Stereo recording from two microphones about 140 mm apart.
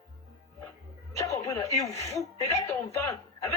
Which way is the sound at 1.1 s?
25° left (ahead or behind).